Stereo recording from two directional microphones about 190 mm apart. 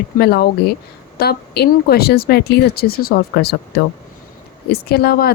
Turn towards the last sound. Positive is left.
turn(degrees=55)  # may be behind; listen again after turning